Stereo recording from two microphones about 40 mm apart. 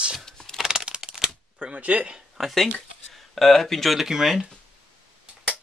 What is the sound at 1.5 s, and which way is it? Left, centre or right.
Speech, right.